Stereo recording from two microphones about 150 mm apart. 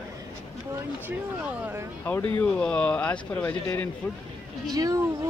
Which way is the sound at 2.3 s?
5° left (ahead or behind).